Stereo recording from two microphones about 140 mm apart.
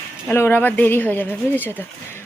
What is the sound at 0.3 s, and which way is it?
Speech, 15° left (ahead or behind).